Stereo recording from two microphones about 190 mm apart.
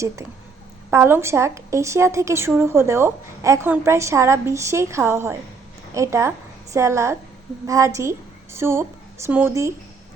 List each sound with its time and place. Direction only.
0.9 s a woman's voice: 15° right (ahead or behind)